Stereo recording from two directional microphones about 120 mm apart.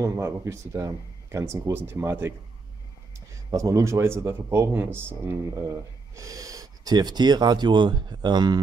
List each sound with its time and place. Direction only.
0.0 s speech: 25° right (ahead or behind)
3.4 s speech: 25° right (ahead or behind)